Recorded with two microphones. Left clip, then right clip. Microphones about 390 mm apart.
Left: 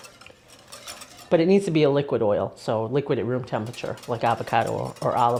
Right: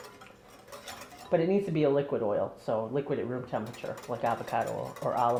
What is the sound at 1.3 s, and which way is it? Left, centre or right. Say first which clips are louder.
Speech: left 8 dB; left.